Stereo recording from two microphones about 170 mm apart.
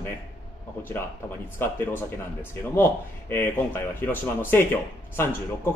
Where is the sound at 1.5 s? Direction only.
15° left (ahead or behind).